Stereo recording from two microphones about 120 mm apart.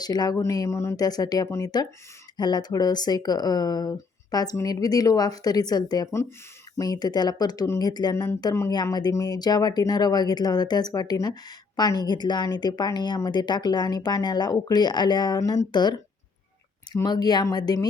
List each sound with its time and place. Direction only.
0.0 s speech: 35° left (ahead or behind)